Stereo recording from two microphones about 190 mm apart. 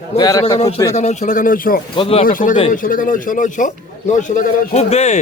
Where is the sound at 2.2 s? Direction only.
45° left (ahead or behind).